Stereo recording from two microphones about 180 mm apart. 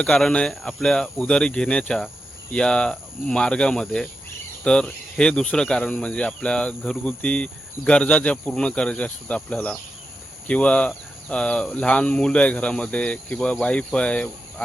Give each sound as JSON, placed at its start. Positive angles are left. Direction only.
{"t": 0.0, "sound": "speech", "side_deg": 5}